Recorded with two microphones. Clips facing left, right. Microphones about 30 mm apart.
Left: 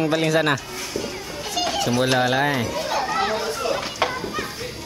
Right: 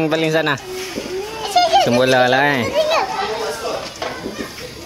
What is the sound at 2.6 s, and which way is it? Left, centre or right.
Chatter, right.